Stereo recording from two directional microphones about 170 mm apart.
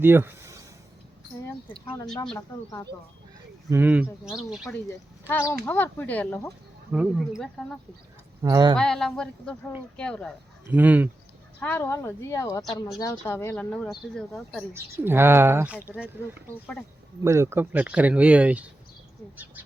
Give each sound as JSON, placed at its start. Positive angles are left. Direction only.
{"t": 0.0, "sound": "a sound", "side_deg": -15}
{"t": 3.7, "sound": "speech", "side_deg": -10}
{"t": 5.3, "sound": "a woman's voice", "side_deg": 15}
{"t": 6.9, "sound": "speech", "side_deg": -5}
{"t": 8.4, "sound": "speech", "side_deg": -25}
{"t": 8.7, "sound": "speech", "side_deg": 5}
{"t": 10.7, "sound": "speech", "side_deg": -10}
{"t": 11.6, "sound": "a woman's voice", "side_deg": 10}
{"t": 14.7, "sound": "speech", "side_deg": -15}
{"t": 17.2, "sound": "speech", "side_deg": -15}